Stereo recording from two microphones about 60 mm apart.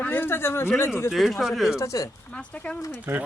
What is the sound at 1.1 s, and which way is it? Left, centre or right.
Speech, centre.